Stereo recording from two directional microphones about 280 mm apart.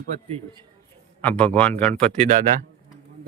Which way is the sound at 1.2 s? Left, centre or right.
Centre.